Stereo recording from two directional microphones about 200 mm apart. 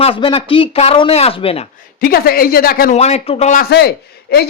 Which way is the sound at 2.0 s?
50° left (ahead or behind).